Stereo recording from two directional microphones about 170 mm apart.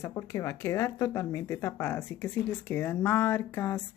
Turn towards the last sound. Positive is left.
turn(degrees=15)  # may be behind; listen again after turning